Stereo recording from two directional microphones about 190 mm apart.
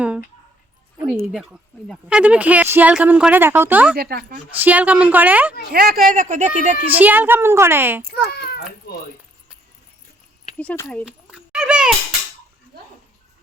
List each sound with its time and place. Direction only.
0.9 s a woman's voice: 5° right (ahead or behind)
3.9 s speech: 55° right (ahead or behind)
4.5 s a woman's voice: 10° right (ahead or behind)
5.7 s speech: 50° right (ahead or behind)
6.8 s a woman's voice: 10° right (ahead or behind)
8.3 s a child's voice: 55° left (ahead or behind)
10.6 s speech: 5° left (ahead or behind)
11.0 s a sound: 5° right (ahead or behind)